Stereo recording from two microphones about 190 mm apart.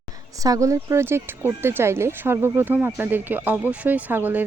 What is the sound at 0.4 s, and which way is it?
Speech, 15° right (ahead or behind).